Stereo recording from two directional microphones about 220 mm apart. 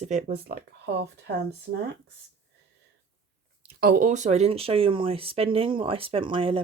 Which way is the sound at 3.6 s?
45° right (ahead or behind).